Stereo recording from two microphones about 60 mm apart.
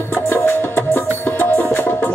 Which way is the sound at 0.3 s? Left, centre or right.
Left.